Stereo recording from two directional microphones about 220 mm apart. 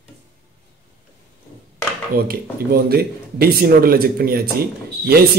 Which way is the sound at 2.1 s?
40° right (ahead or behind).